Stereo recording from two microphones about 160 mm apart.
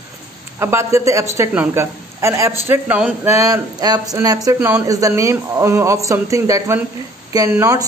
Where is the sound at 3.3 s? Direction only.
20° right (ahead or behind).